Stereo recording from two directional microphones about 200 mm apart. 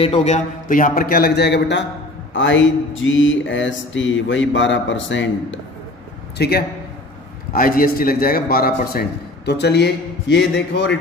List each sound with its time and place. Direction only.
0.0 s a man's voice: 30° left (ahead or behind); by 1.9 s 60° left (ahead or behind)
2.3 s a sound: 65° left (ahead or behind)
6.3 s a man's voice: 55° left (ahead or behind)
9.5 s a man's voice: 60° left (ahead or behind)